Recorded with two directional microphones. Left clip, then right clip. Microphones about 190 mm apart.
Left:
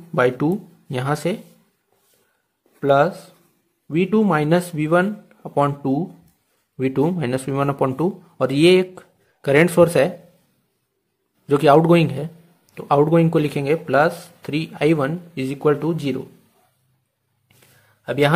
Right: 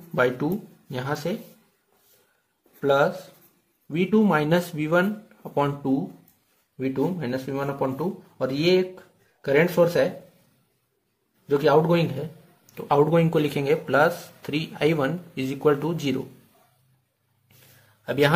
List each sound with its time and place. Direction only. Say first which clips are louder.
0.1 s speech: left 5 dB; 30° left (ahead or behind)
2.8 s speech: left 4 dB; 25° left (ahead or behind)
6.8 s speech: left 6 dB; 40° left (ahead or behind)
11.4 s a man's voice: left 6 dB; 40° left (ahead or behind)
12.7 s speech: left 4 dB; 25° left (ahead or behind)
18.0 s a man's voice: left 3 dB; 25° left (ahead or behind)